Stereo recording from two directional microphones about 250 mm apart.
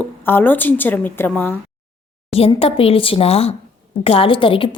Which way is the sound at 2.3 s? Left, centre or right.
Left.